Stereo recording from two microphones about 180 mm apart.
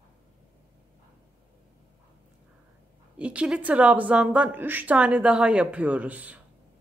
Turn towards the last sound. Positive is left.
turn(degrees=-10)  # may be behind; listen again after turning